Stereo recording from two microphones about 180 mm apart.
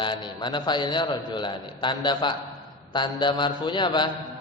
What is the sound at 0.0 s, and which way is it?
A man's voice, 25° left (ahead or behind).